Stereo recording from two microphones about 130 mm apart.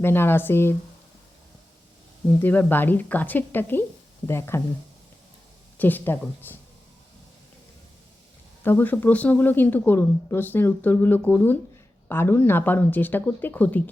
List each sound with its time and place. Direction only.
0.0 s speech: 15° left (ahead or behind)
2.4 s speech: 15° left (ahead or behind)
5.7 s speech: 15° left (ahead or behind)
8.6 s speech: 15° left (ahead or behind)